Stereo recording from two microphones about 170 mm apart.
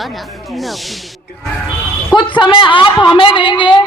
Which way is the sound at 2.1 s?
30° left (ahead or behind).